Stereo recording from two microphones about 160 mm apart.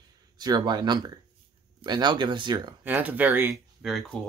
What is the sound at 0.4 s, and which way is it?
Speech, 25° right (ahead or behind).